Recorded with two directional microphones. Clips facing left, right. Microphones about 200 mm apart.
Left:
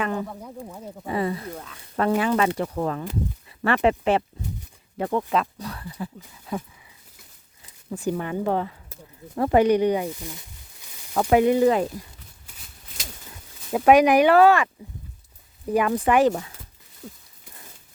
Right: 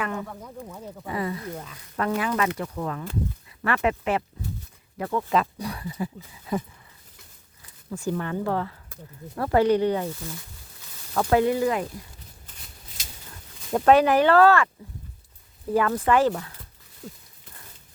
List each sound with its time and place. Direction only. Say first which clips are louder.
0.0 s speech: left 3 dB; 30° left (ahead or behind)
0.3 s speech: left 2 dB; 10° left (ahead or behind)
1.0 s speech: left 3 dB; 25° left (ahead or behind)
5.5 s speech: right 3 dB; 10° right (ahead or behind)
7.9 s speech: left 2 dB; 15° left (ahead or behind)
12.5 s shuffling cards: right 1 dB; 5° left (ahead or behind)
13.7 s speech: left 2 dB; 10° left (ahead or behind)
15.7 s speech: left 1 dB; 15° left (ahead or behind)
17.0 s a sound: even; centre (ahead or behind)